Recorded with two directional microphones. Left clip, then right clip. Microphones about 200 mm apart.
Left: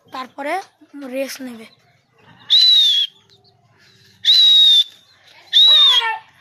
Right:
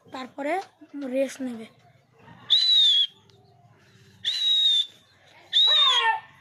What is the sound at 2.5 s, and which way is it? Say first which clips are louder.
Whistle: left 7 dB; 60° left (ahead or behind).